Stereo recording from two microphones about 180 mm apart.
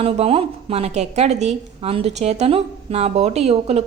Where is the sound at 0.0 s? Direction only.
35° right (ahead or behind).